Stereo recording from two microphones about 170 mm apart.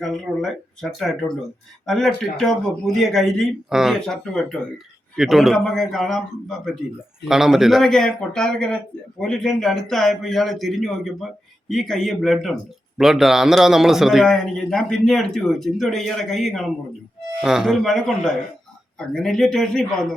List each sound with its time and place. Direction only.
0.0 s a man's voice: centre (ahead or behind)